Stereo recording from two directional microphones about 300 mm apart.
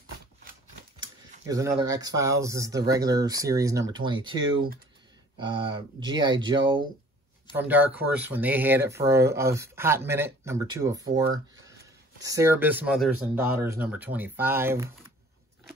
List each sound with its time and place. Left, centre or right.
0.9 s speech: centre